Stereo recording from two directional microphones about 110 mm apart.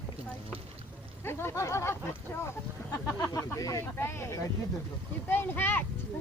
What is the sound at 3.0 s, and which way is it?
Speech, 30° left (ahead or behind).